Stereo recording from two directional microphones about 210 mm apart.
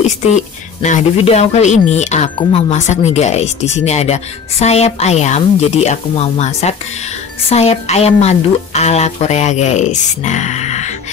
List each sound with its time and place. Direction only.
0.8 s speech: 35° left (ahead or behind)